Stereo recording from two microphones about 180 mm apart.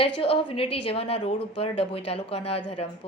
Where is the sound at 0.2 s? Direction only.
30° left (ahead or behind).